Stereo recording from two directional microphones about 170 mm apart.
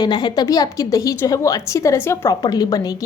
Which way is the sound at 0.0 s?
25° left (ahead or behind).